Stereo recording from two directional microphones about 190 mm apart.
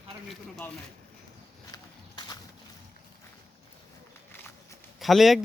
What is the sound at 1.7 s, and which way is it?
Walk, 20° left (ahead or behind).